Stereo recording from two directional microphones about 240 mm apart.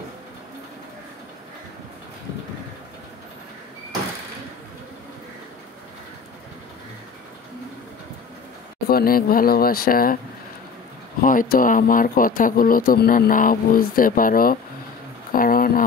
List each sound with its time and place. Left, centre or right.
8.8 s speech: left
11.1 s speech: left